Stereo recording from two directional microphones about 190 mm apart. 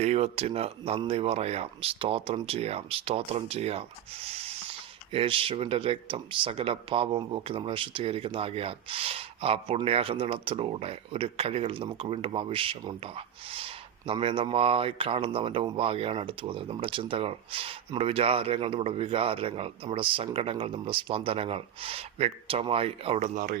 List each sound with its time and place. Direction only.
0.0 s speech: 35° right (ahead or behind)